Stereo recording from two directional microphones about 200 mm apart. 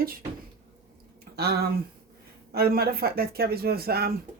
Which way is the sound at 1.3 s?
50° right (ahead or behind).